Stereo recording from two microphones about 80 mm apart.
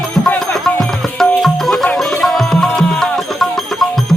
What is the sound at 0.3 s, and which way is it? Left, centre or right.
Music, centre.